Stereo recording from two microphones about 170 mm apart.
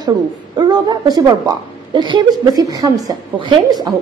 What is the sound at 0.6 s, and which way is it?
A woman's voice, 25° right (ahead or behind).